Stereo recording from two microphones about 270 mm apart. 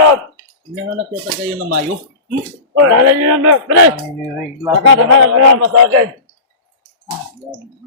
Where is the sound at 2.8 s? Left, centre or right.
Right.